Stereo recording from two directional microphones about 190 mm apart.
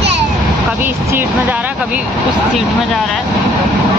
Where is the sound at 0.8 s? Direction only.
10° right (ahead or behind).